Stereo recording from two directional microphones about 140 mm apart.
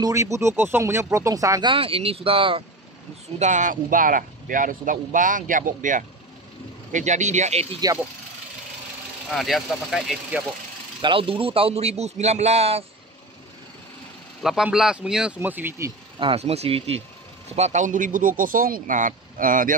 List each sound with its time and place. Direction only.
0.0 s speech: 20° right (ahead or behind)
1.7 s speech: 40° right (ahead or behind)
3.3 s a man's voice: 60° right (ahead or behind)
7.8 s speech: 30° right (ahead or behind)
9.3 s speech: centre (ahead or behind)
11.0 s a man's voice: 40° right (ahead or behind)
14.4 s speech: 5° right (ahead or behind)
16.2 s a man's voice: 45° right (ahead or behind); by 19.7 s 75° right (ahead or behind)